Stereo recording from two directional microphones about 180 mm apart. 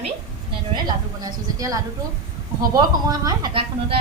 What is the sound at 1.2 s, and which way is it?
Speech, 20° right (ahead or behind).